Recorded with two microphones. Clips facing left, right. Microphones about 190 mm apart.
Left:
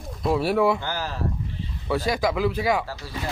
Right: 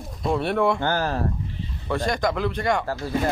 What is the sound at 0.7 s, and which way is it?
Speech, 55° right (ahead or behind).